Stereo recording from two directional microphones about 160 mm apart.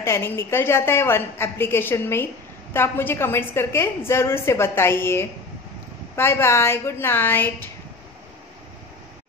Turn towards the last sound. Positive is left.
turn(degrees=15)  # may be behind; listen again after turning